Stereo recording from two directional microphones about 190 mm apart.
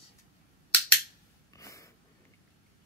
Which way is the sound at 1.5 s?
15° left (ahead or behind).